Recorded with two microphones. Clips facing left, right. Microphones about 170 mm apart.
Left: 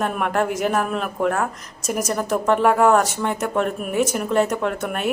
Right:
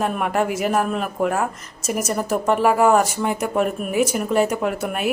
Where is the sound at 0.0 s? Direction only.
5° right (ahead or behind).